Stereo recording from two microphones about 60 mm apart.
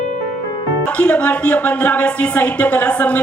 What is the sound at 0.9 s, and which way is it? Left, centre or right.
A woman's voice, left.